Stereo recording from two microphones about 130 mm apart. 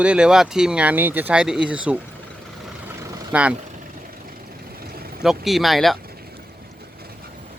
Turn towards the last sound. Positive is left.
turn(degrees=0)  # may be behind; listen again after turning